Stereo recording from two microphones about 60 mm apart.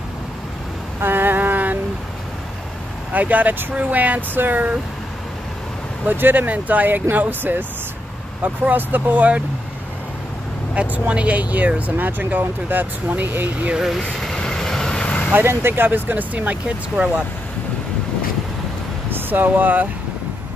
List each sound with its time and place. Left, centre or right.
1.0 s a sound: right
3.1 s speech: right
6.0 s speech: right
10.7 s speech: right
14.0 s vehicle: centre
15.3 s speech: right; by 17.2 s centre
19.0 s speech: right